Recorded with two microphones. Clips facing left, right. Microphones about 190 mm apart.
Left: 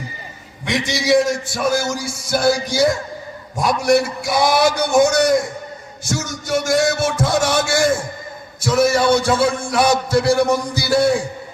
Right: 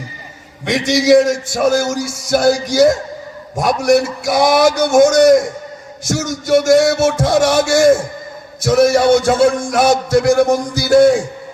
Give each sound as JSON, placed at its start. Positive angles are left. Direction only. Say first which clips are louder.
{"t": 0.6, "sound": "a man's voice", "louder": "right 6 dB", "side_deg": -55}
{"t": 6.1, "sound": "music", "louder": "right 7 dB", "side_deg": -55}
{"t": 8.6, "sound": "a man's voice", "louder": "right 4 dB", "side_deg": -55}